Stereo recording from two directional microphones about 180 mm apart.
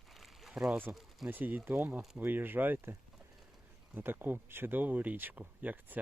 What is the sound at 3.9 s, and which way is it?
Speech, 10° right (ahead or behind).